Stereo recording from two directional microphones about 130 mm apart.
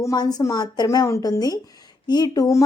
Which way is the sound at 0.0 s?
30° left (ahead or behind).